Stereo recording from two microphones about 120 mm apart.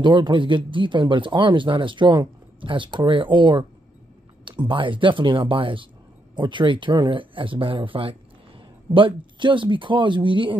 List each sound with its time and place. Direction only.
0.0 s speech: 40° right (ahead or behind)